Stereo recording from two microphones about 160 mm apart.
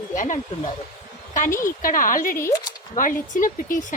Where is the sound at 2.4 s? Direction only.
20° left (ahead or behind).